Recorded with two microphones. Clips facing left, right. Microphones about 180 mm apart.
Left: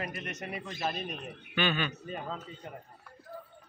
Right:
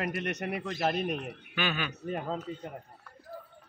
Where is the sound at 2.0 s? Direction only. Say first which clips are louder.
Right 5 dB; 55° right (ahead or behind).